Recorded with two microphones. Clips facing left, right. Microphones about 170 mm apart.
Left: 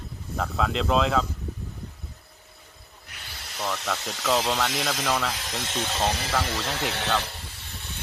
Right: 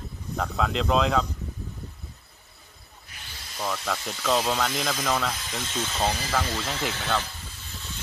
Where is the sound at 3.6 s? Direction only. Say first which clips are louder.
Even; 5° left (ahead or behind).